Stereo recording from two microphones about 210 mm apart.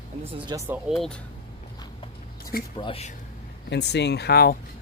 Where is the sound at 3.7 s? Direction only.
55° left (ahead or behind).